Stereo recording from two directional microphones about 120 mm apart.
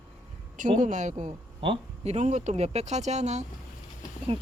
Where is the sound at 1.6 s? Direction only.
55° right (ahead or behind); by 3.4 s 70° right (ahead or behind).